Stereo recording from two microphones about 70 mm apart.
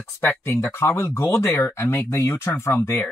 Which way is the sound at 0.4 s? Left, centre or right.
Left.